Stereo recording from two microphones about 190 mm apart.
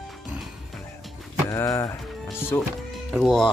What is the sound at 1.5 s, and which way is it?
Speech, 15° left (ahead or behind).